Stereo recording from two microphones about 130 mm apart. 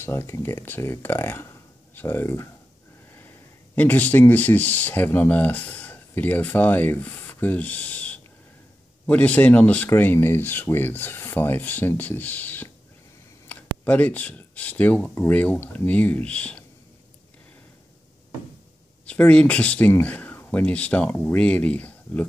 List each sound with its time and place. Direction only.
0.0 s speech: 20° left (ahead or behind)
19.0 s speech: 10° left (ahead or behind)